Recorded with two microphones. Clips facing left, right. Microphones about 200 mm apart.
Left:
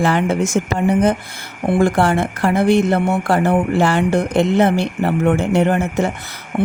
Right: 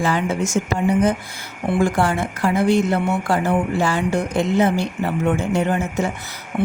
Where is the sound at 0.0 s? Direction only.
65° left (ahead or behind).